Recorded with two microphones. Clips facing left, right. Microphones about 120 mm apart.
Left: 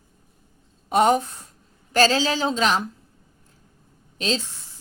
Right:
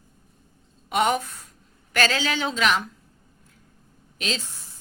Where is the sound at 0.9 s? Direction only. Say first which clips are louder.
Left 4 dB; 35° left (ahead or behind).